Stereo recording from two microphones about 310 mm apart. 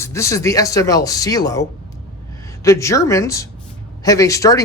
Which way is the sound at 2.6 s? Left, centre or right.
Centre.